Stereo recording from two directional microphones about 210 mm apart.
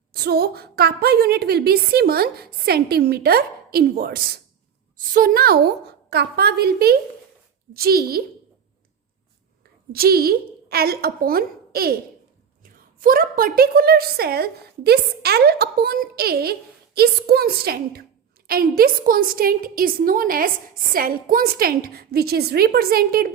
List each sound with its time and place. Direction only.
0.1 s a woman's voice: 50° right (ahead or behind)
9.9 s a woman's voice: 45° right (ahead or behind)
13.0 s a woman's voice: 40° right (ahead or behind)